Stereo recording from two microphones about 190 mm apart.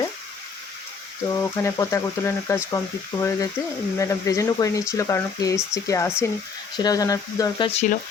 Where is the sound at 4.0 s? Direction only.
15° left (ahead or behind).